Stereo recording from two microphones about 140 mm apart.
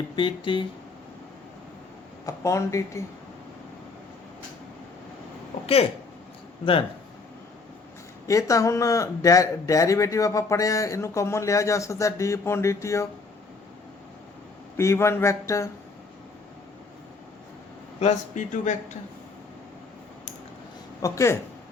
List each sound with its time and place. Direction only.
0.2 s speech: 35° left (ahead or behind)
2.2 s speech: 20° left (ahead or behind)
5.6 s speech: 45° left (ahead or behind)
8.3 s speech: 25° left (ahead or behind)
14.8 s speech: 20° left (ahead or behind)
18.0 s speech: 60° left (ahead or behind)
21.0 s speech: 20° left (ahead or behind)